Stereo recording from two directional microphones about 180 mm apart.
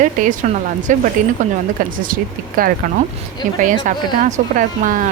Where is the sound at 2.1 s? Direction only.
50° right (ahead or behind).